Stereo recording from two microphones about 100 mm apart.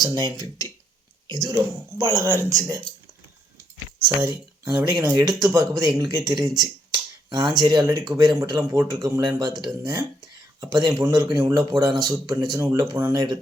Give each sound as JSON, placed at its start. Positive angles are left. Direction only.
{"t": 0.0, "sound": "speech", "side_deg": -40}
{"t": 4.2, "sound": "speech", "side_deg": -30}